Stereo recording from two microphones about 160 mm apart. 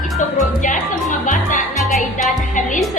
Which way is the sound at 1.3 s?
55° left (ahead or behind).